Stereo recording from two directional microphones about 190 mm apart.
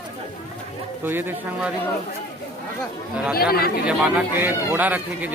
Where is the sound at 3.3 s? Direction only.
55° left (ahead or behind).